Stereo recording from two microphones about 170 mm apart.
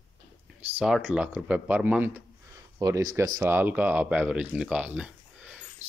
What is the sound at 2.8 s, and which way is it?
Speech, 20° right (ahead or behind).